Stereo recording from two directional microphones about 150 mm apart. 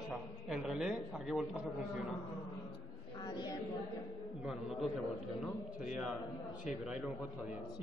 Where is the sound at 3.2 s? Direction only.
25° left (ahead or behind).